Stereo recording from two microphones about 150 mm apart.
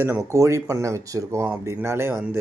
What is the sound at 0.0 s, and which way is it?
Speech, 15° right (ahead or behind).